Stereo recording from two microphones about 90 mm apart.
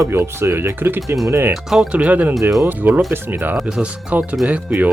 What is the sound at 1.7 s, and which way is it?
Speech, 10° right (ahead or behind).